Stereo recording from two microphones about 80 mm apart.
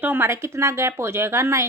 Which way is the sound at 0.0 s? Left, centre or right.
Right.